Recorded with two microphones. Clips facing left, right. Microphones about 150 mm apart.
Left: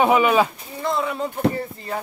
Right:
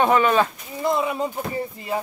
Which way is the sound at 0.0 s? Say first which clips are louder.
Left 1 dB; 10° left (ahead or behind).